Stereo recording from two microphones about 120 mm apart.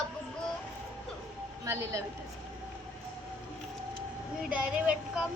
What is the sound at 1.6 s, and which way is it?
Speech, 25° right (ahead or behind).